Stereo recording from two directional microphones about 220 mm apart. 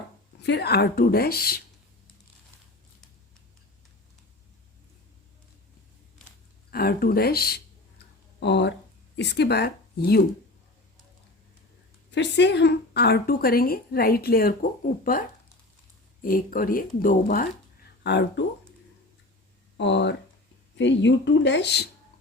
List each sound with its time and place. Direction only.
0.4 s a woman's voice: 50° left (ahead or behind)
6.7 s a woman's voice: 45° left (ahead or behind)
12.1 s a woman's voice: 50° left (ahead or behind)
16.2 s speech: 40° left (ahead or behind)
18.0 s a woman's voice: 50° left (ahead or behind)
19.7 s a woman's voice: 55° left (ahead or behind)